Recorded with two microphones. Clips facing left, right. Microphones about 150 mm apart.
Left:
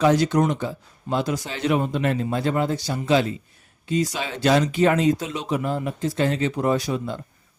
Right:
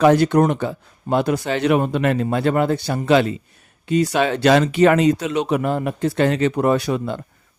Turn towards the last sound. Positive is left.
turn(degrees=-65)  # may be behind; listen again after turning